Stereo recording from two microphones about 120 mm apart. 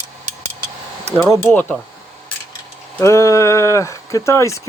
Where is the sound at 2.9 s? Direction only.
25° left (ahead or behind).